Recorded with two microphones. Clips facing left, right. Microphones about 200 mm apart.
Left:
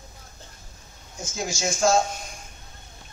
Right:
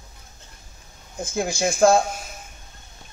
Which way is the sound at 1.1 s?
55° right (ahead or behind).